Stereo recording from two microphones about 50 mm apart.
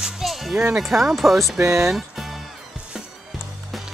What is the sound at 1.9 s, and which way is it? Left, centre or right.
Music, centre.